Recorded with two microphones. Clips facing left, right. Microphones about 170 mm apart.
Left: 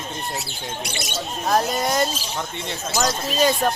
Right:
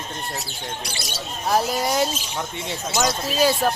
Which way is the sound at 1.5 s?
5° right (ahead or behind).